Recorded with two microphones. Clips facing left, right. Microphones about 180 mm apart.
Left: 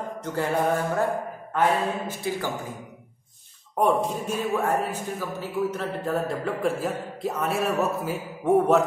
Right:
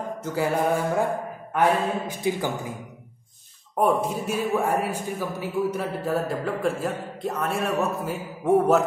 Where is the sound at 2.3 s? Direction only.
15° right (ahead or behind).